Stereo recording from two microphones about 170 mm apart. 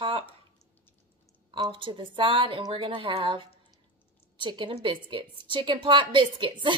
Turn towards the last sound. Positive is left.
turn(degrees=-30)  # may be behind; listen again after turning